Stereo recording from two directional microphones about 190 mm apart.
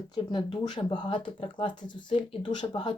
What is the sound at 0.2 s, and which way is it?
Speech, 25° left (ahead or behind).